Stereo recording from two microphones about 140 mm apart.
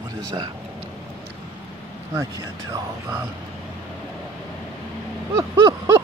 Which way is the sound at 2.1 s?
25° right (ahead or behind).